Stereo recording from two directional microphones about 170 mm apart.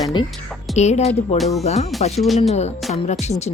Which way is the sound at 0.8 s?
40° left (ahead or behind).